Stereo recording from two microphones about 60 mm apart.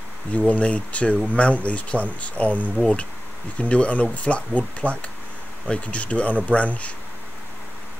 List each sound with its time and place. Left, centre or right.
0.5 s speech: left